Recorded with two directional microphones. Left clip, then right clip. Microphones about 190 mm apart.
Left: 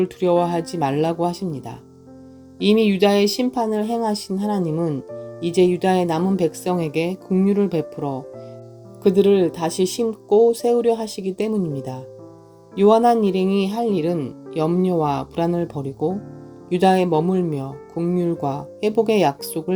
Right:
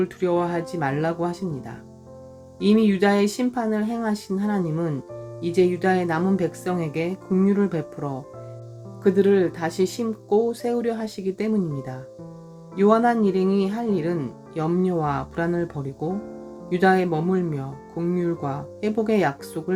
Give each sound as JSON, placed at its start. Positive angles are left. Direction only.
{"t": 0.0, "sound": "speech", "side_deg": 25}